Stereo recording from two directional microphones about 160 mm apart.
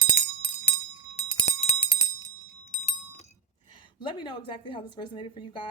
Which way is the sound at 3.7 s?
30° left (ahead or behind).